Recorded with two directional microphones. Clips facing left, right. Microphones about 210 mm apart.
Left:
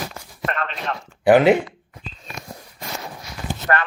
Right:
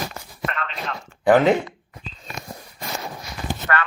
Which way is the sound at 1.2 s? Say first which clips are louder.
Left 2 dB; 10° left (ahead or behind).